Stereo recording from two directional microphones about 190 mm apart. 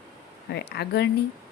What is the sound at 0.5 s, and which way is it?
Speech, 60° left (ahead or behind).